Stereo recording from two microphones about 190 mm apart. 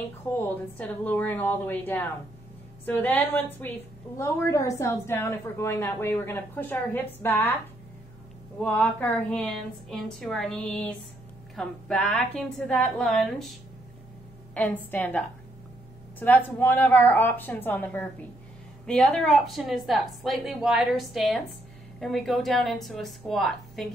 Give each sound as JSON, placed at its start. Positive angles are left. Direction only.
{"t": 0.3, "sound": "a woman's voice", "side_deg": 10}
{"t": 8.5, "sound": "a woman's voice", "side_deg": 5}